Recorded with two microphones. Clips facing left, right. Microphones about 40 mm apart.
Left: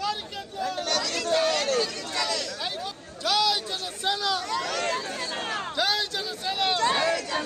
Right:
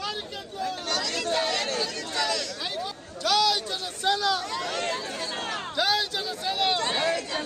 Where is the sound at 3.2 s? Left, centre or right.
Centre.